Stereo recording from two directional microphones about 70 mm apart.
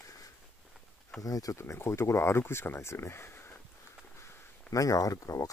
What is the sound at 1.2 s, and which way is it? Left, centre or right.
Speech, left.